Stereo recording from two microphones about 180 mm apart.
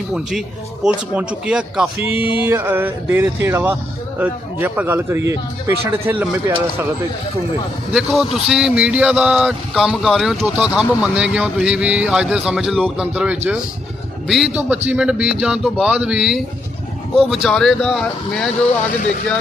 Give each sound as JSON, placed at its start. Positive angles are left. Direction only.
{"t": 0.1, "sound": "a man's voice", "side_deg": 0}
{"t": 7.9, "sound": "speech", "side_deg": 0}